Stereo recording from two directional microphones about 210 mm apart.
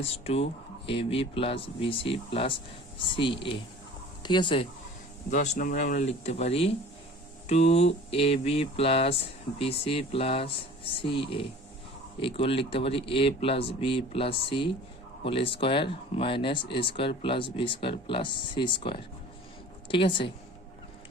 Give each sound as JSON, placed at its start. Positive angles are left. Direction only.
{"t": 0.0, "sound": "speech", "side_deg": 30}
{"t": 5.3, "sound": "speech", "side_deg": 35}